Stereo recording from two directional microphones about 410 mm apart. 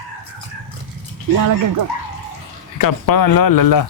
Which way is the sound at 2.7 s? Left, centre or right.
Left.